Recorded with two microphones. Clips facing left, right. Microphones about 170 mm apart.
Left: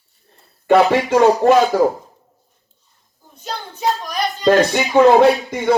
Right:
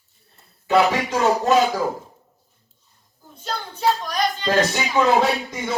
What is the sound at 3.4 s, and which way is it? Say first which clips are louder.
Child singing: even; 10° left (ahead or behind).